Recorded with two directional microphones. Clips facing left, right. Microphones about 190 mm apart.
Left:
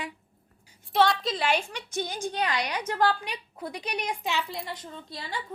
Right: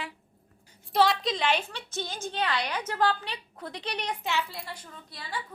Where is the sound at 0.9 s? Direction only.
Centre (ahead or behind).